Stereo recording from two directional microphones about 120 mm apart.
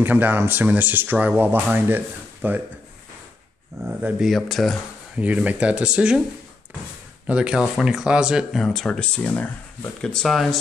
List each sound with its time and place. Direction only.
0.0 s speech: 15° right (ahead or behind)
3.8 s speech: 25° right (ahead or behind)
4.2 s speech: centre (ahead or behind)
5.1 s speech: 10° right (ahead or behind)
7.2 s speech: 5° right (ahead or behind)